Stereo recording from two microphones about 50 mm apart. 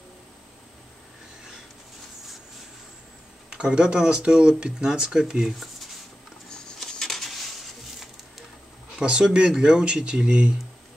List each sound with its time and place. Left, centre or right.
3.5 s speech: centre
6.8 s a sound: centre
9.0 s speech: centre